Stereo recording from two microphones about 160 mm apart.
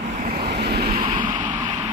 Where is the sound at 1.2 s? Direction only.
30° right (ahead or behind).